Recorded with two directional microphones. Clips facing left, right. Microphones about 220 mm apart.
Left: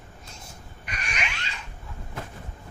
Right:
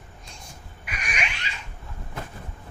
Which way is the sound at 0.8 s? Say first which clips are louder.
Right 1 dB; 10° right (ahead or behind).